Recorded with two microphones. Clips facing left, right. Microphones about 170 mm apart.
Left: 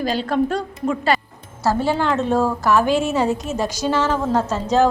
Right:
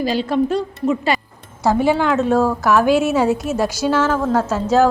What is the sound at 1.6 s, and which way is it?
A woman's voice, 15° right (ahead or behind).